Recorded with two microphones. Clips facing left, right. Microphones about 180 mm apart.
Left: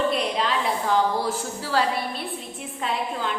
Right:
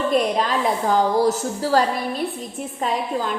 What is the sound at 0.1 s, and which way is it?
A woman's voice, 45° right (ahead or behind).